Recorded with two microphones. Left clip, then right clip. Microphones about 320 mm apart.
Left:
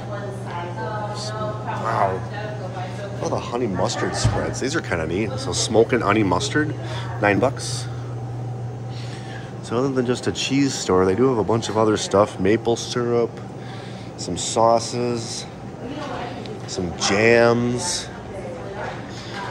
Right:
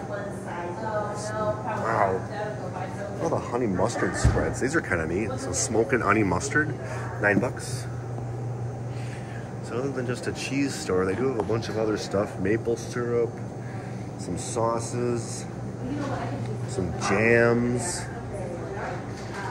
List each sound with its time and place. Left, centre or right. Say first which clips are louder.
3.3 s a man's voice: left 3 dB; centre
9.8 s speech: left 8 dB; left
14.2 s a man's voice: left 9 dB; centre
16.7 s a man's voice: left 5 dB; centre